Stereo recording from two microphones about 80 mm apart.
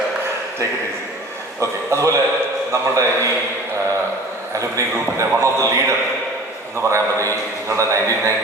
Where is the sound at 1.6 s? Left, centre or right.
Right.